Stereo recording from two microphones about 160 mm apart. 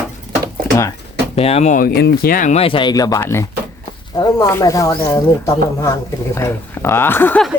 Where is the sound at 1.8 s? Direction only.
80° left; by 2.6 s 60° left (ahead or behind).